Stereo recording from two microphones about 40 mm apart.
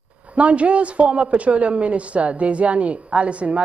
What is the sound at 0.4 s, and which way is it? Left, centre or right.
A woman's voice, right.